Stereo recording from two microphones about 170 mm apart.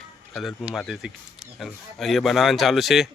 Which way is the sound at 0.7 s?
Centre (ahead or behind).